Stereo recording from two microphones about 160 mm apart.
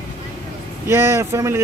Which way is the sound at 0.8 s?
15° right (ahead or behind).